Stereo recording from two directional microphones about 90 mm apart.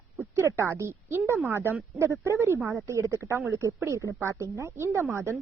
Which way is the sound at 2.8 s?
35° right (ahead or behind).